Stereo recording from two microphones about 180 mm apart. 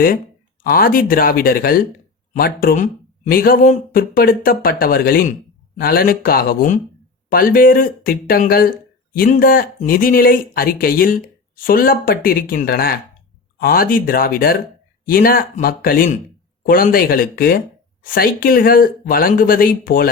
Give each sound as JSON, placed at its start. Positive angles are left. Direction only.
{"t": 0.6, "sound": "speech", "side_deg": 55}